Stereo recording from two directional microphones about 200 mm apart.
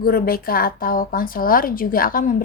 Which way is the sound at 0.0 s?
50° left (ahead or behind).